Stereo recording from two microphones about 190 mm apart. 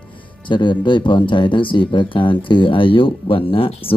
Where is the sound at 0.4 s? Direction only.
25° left (ahead or behind).